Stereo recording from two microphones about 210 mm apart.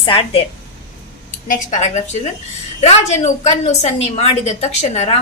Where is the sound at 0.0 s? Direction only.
25° left (ahead or behind).